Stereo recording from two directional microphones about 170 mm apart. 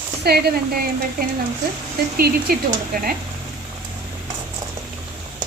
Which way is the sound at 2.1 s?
65° right (ahead or behind).